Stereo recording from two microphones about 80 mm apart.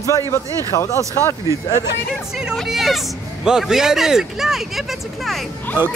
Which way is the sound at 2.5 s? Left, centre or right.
Centre.